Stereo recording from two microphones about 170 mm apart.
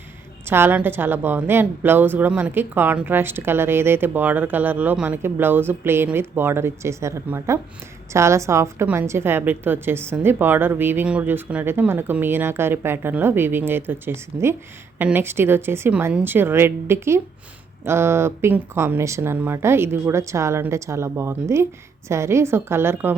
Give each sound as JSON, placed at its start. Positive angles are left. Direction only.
{"t": 0.4, "sound": "a woman's voice", "side_deg": -15}